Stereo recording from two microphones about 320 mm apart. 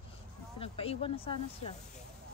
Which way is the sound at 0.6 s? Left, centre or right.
Centre.